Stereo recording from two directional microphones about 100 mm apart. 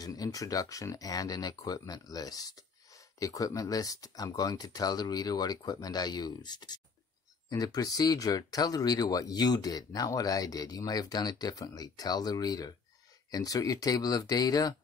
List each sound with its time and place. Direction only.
0.0 s speech: 40° left (ahead or behind)